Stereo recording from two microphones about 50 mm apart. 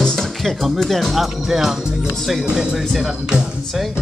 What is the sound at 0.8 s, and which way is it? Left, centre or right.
A man's voice, centre.